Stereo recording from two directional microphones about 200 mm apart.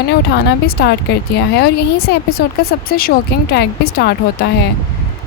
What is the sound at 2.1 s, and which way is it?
Speech, 55° left (ahead or behind).